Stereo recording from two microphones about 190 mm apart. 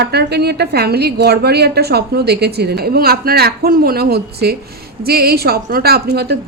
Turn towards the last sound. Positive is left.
turn(degrees=-60)  # may be behind; listen again after turning